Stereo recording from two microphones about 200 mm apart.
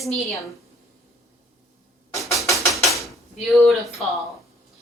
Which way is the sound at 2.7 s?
Centre (ahead or behind).